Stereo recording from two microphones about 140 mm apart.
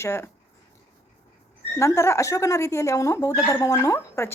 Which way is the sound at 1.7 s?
20° left (ahead or behind).